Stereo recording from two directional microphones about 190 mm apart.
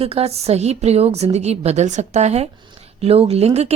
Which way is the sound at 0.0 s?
30° right (ahead or behind).